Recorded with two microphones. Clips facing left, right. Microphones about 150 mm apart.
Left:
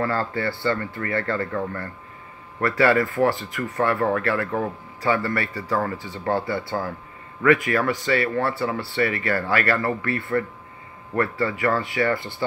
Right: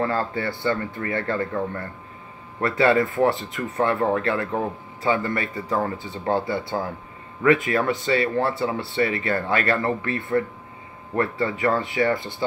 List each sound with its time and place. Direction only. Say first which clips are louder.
0.0 s speech: even; 20° right (ahead or behind)